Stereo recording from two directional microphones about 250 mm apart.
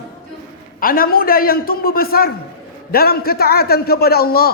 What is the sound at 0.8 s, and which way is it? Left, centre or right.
A man's voice, left.